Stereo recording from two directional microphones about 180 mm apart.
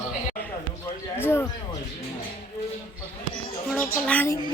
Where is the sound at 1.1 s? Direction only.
10° left (ahead or behind).